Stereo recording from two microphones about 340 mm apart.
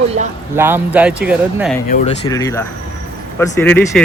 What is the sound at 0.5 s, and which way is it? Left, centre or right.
Speech, centre.